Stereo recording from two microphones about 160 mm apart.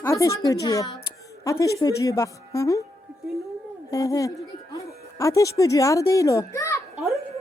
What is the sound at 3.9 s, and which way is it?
A woman's voice, 20° left (ahead or behind).